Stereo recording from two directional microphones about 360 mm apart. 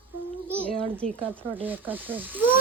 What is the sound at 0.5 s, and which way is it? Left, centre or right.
Speech, centre.